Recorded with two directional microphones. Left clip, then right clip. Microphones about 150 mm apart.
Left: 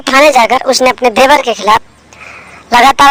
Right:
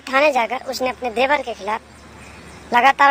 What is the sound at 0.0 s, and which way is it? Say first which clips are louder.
A woman's voice: left 11 dB; 45° left (ahead or behind).